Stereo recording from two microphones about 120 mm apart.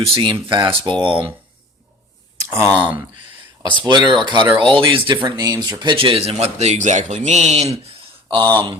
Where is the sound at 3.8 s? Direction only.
40° right (ahead or behind).